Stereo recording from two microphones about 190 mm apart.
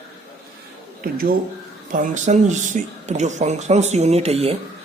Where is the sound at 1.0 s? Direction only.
50° right (ahead or behind).